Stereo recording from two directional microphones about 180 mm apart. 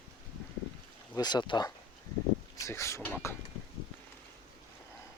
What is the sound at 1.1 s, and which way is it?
Speech, 25° left (ahead or behind).